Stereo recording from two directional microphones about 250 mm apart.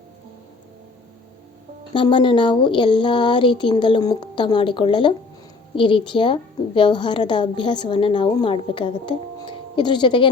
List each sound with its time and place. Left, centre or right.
1.9 s a woman's voice: centre